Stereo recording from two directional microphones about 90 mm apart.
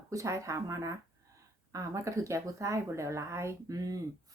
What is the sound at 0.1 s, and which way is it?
Speech, 35° right (ahead or behind).